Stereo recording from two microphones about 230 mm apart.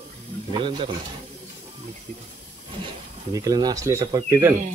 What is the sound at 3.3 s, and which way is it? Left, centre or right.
Speech, centre.